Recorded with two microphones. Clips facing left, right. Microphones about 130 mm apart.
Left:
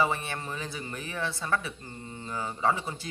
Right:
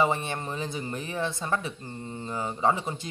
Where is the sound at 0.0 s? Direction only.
25° right (ahead or behind).